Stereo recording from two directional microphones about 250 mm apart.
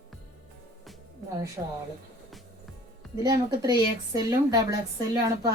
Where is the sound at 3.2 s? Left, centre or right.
Centre.